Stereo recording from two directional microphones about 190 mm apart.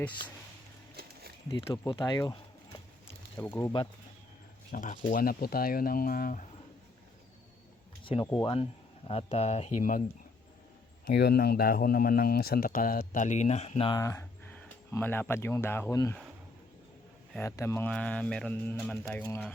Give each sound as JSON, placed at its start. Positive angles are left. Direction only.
{"t": 1.5, "sound": "speech", "side_deg": 20}
{"t": 3.3, "sound": "speech", "side_deg": 10}
{"t": 4.7, "sound": "speech", "side_deg": 45}
{"t": 8.0, "sound": "speech", "side_deg": 25}
{"t": 11.0, "sound": "speech", "side_deg": 60}
{"t": 13.9, "sound": "speech", "side_deg": 15}
{"t": 17.3, "sound": "speech", "side_deg": 15}